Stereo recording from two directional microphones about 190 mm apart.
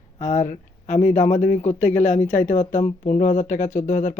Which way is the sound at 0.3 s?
40° left (ahead or behind).